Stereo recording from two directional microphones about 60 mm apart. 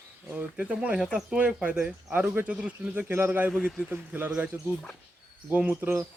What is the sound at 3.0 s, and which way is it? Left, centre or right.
Speech, right.